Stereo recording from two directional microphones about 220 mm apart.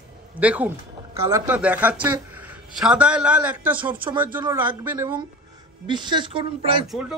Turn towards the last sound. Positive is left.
turn(degrees=0)  # may be behind; listen again after turning